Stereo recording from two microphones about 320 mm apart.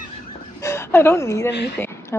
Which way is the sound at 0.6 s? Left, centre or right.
Centre.